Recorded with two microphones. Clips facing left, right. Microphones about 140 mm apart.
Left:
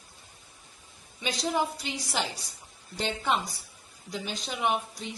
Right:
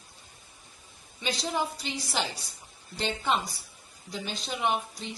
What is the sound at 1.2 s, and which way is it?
A woman's voice, 10° left (ahead or behind).